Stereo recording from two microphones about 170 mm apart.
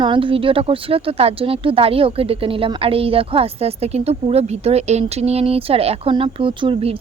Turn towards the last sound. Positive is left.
turn(degrees=-35)  # may be behind; listen again after turning